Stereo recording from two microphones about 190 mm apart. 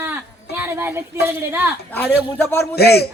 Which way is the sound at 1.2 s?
10° right (ahead or behind).